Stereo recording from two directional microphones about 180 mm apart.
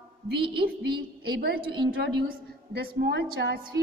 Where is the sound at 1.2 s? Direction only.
60° right (ahead or behind).